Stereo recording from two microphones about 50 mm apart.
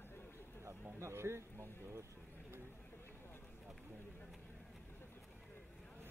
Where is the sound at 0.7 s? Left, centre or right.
Right.